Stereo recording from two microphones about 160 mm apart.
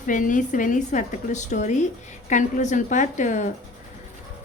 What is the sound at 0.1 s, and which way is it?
Speech, 55° left (ahead or behind).